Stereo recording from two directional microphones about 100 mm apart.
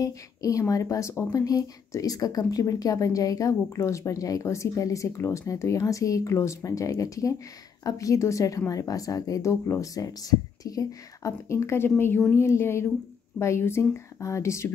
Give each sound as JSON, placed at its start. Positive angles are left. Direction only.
{"t": 0.0, "sound": "speech", "side_deg": 35}